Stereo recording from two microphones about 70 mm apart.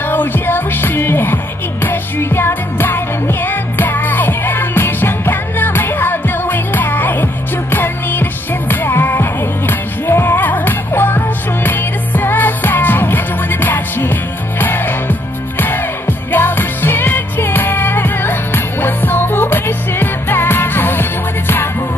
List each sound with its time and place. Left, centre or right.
0.1 s music: left